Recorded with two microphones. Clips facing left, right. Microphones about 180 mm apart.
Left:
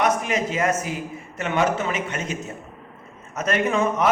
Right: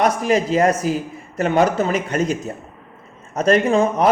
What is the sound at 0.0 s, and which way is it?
Speech, 35° right (ahead or behind).